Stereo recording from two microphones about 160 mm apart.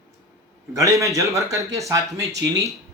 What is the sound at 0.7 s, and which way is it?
Speech, 20° right (ahead or behind).